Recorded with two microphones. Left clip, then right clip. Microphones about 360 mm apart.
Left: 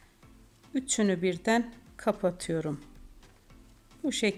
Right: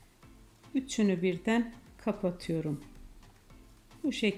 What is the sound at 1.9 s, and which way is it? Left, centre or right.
Speech, left.